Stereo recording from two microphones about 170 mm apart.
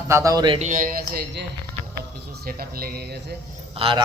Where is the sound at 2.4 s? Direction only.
60° right (ahead or behind).